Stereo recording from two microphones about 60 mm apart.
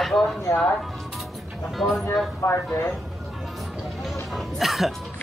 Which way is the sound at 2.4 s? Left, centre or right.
Left.